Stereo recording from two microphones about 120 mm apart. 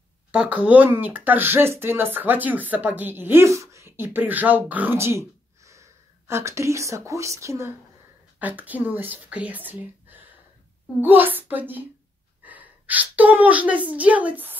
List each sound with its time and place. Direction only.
0.3 s a woman's voice: 10° right (ahead or behind)